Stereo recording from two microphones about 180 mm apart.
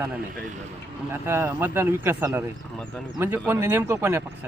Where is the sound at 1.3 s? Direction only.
15° right (ahead or behind).